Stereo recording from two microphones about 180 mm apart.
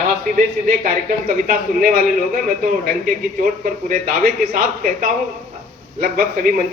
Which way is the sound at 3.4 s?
50° right (ahead or behind).